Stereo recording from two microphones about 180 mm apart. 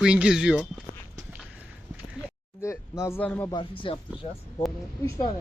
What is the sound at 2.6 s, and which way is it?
Speech, 15° left (ahead or behind).